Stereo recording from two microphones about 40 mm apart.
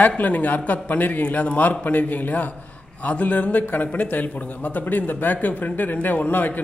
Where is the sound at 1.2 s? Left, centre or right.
Left.